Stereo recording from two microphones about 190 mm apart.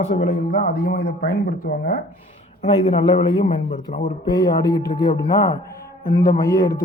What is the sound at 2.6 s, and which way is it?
Speech, 30° left (ahead or behind).